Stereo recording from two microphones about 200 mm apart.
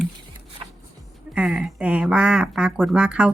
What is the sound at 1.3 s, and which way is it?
A woman's voice, 5° right (ahead or behind).